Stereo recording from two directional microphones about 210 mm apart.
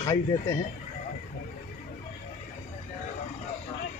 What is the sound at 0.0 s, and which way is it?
Speech, 15° left (ahead or behind).